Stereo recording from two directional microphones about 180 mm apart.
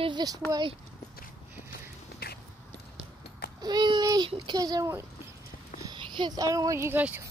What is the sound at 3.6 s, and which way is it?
Child singing, 25° right (ahead or behind).